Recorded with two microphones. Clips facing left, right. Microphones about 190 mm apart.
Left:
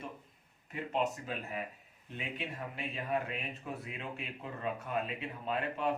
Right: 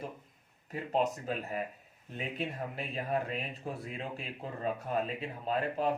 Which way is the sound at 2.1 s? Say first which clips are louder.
Right 4 dB; 40° right (ahead or behind).